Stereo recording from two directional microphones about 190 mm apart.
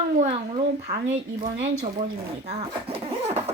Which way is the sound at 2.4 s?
35° right (ahead or behind).